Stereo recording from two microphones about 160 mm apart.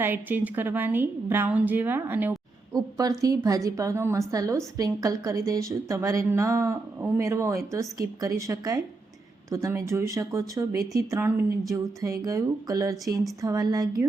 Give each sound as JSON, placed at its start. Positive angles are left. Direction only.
{"t": 0.0, "sound": "a woman's voice", "side_deg": -10}
{"t": 2.7, "sound": "a woman's voice", "side_deg": -20}